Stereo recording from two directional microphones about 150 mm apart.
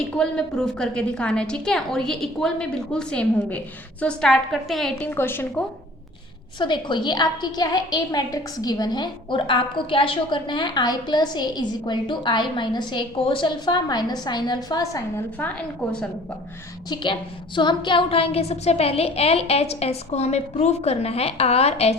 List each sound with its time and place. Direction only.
0.2 s a woman's voice: 5° left (ahead or behind)
5.1 s a woman's voice: 15° left (ahead or behind)
6.6 s a woman's voice: 30° left (ahead or behind)
15.4 s a woman's voice: 5° left (ahead or behind)
16.9 s a woman's voice: 35° left (ahead or behind)